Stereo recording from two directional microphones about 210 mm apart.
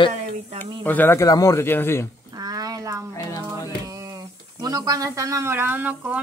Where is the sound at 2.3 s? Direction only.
20° right (ahead or behind).